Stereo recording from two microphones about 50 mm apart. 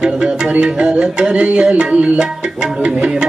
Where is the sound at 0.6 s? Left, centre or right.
Right.